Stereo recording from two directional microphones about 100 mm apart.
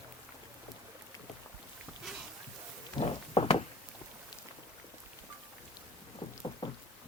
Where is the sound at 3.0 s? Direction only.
65° left (ahead or behind).